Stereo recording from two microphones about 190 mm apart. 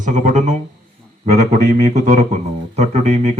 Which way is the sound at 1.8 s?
35° right (ahead or behind).